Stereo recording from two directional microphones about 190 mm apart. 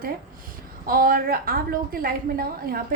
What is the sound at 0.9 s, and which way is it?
A woman's voice, 50° right (ahead or behind).